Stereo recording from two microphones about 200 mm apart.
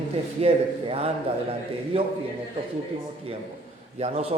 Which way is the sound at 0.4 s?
30° right (ahead or behind).